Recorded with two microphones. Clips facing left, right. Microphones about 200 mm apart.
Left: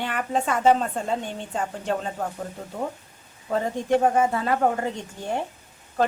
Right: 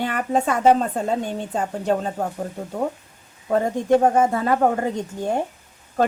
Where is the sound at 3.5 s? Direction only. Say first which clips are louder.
Right 5 dB; 45° right (ahead or behind).